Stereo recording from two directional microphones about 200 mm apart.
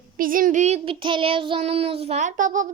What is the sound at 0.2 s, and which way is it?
Child singing, 45° right (ahead or behind).